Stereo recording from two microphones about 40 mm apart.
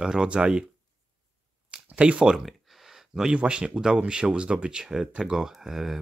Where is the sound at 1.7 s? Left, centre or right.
Right.